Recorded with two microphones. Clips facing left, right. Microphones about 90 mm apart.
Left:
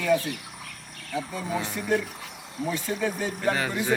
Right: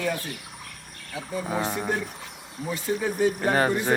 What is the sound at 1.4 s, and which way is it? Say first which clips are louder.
Speech: right 1 dB; 40° right (ahead or behind).